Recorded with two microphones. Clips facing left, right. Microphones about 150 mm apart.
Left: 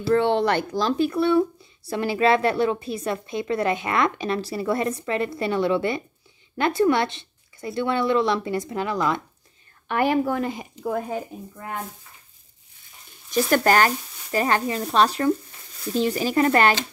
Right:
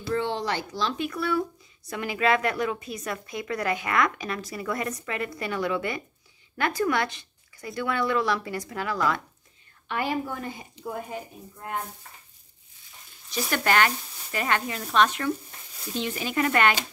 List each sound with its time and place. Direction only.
0.1 s a woman's voice: 65° left (ahead or behind); by 9.2 s 20° left (ahead or behind)
9.8 s speech: 60° left (ahead or behind); by 10.7 s 90° left
13.3 s speech: 45° left (ahead or behind)